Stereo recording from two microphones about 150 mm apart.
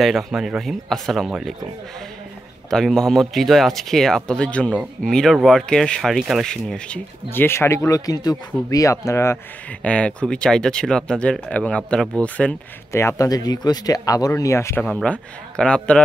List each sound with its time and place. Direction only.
0.0 s speech: centre (ahead or behind)
2.7 s speech: 5° left (ahead or behind)
7.2 s speech: 15° left (ahead or behind)
12.9 s speech: 20° left (ahead or behind)
14.9 s speech: 5° left (ahead or behind)